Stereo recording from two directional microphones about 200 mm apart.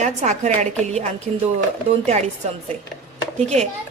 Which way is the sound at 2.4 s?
35° right (ahead or behind).